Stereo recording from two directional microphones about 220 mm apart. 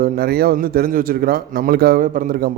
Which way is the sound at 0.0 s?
45° right (ahead or behind).